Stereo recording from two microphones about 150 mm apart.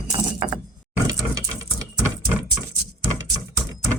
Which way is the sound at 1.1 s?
25° right (ahead or behind).